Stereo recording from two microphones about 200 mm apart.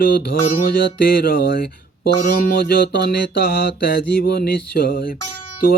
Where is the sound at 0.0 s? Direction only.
50° left (ahead or behind).